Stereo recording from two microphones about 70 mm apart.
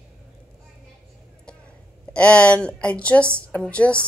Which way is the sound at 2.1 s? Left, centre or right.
Centre.